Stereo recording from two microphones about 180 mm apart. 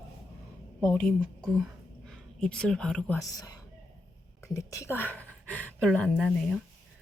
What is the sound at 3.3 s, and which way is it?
Speech, 20° left (ahead or behind).